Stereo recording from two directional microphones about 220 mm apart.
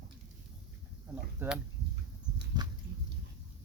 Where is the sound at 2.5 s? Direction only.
20° right (ahead or behind).